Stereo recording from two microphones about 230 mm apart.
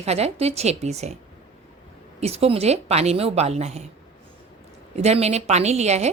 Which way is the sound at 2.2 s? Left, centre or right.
Right.